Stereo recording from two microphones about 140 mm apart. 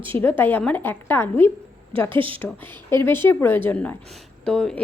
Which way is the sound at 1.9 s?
40° right (ahead or behind).